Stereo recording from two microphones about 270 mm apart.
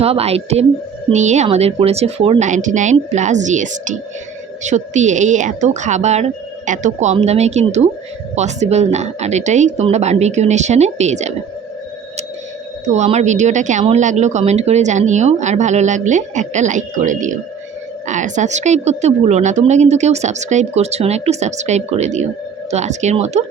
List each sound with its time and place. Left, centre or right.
0.0 s speech: right
12.9 s speech: right